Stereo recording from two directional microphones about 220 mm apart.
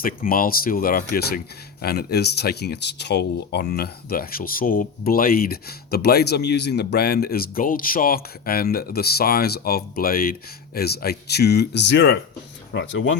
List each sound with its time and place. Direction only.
0.0 s speech: 40° left (ahead or behind); by 13.1 s 55° left (ahead or behind)